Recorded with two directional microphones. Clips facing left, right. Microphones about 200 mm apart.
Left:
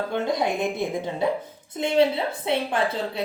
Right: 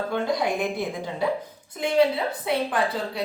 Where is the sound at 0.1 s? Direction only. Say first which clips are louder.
Even; 20° left (ahead or behind).